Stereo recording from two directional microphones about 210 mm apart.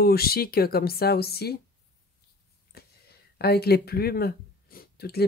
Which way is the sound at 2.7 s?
50° left (ahead or behind).